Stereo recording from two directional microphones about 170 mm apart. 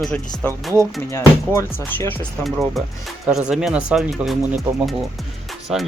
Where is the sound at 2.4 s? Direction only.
Centre (ahead or behind).